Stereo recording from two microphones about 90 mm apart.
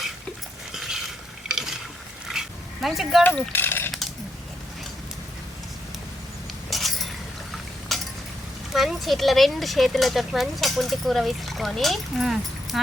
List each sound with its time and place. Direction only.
0.7 s stir: 5° right (ahead or behind)
2.3 s dog: 5° right (ahead or behind)
3.5 s coin: 25° left (ahead or behind)
6.7 s a sound: centre (ahead or behind)
8.7 s speech: centre (ahead or behind)